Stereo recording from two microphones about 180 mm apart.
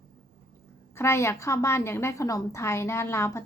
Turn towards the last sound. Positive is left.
turn(degrees=15)  # may be behind; listen again after turning